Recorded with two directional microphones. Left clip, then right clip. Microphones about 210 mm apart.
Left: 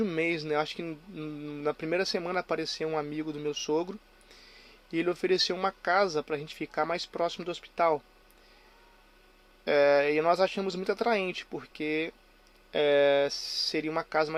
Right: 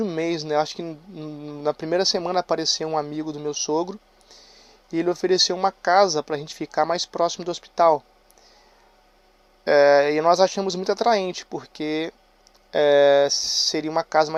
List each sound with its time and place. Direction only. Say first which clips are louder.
0.0 s speech: right 4 dB; 15° right (ahead or behind)
9.6 s speech: right 8 dB; 25° right (ahead or behind)